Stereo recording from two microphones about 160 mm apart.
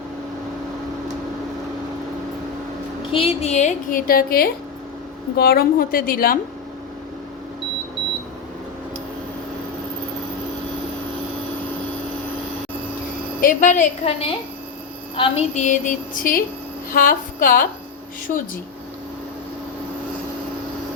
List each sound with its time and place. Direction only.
3.1 s a woman's voice: 35° left (ahead or behind); by 6.4 s 65° left (ahead or behind)
13.4 s a woman's voice: 60° left (ahead or behind)
14.0 s a woman's voice: 35° left (ahead or behind); by 17.7 s 60° left (ahead or behind)